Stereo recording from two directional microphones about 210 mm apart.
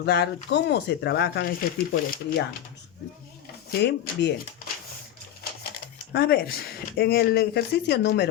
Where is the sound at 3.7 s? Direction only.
55° left (ahead or behind).